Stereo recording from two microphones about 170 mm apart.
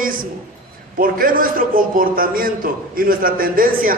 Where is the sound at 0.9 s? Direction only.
55° right (ahead or behind).